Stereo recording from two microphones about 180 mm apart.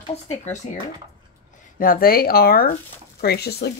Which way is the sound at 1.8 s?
50° left (ahead or behind).